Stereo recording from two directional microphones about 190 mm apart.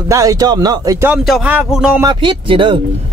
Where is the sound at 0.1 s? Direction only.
15° right (ahead or behind).